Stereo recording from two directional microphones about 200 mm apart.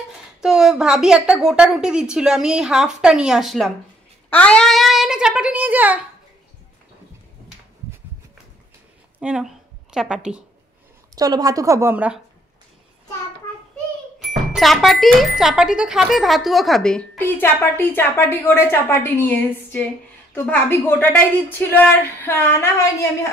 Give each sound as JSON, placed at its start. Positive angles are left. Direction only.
{"t": 0.4, "sound": "speech", "side_deg": 0}
{"t": 9.2, "sound": "speech", "side_deg": -5}
{"t": 11.1, "sound": "a woman's voice", "side_deg": -20}
{"t": 14.5, "sound": "a woman's voice", "side_deg": 0}